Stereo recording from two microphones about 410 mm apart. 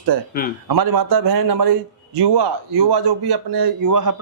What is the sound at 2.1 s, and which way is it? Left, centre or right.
A man's voice, right.